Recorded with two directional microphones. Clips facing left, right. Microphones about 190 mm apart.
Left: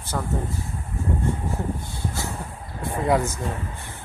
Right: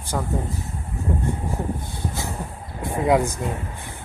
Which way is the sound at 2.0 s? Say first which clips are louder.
Right 1 dB; 20° right (ahead or behind).